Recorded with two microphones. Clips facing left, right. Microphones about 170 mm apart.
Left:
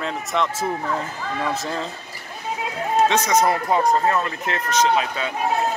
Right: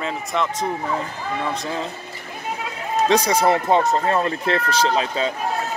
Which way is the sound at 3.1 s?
35° right (ahead or behind).